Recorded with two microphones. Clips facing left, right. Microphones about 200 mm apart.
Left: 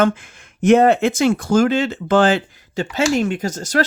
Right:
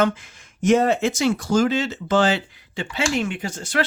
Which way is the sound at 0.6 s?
60° left (ahead or behind).